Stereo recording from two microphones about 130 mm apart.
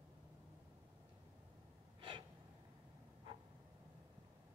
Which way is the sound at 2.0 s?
40° right (ahead or behind).